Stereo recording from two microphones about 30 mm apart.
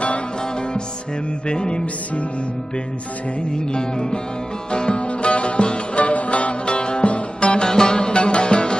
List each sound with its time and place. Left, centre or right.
1.5 s music: left
3.5 s music: left
7.7 s music: left
8.1 s music: left